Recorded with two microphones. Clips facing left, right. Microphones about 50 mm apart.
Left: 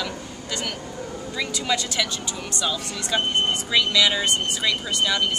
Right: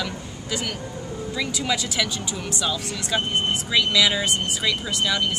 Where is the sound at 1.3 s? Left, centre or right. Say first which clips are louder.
Even; centre.